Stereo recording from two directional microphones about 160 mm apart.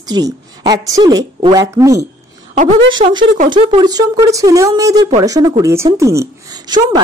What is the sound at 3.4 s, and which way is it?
A man's voice, 30° right (ahead or behind).